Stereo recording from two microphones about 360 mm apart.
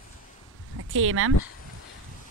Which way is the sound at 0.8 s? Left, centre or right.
Right.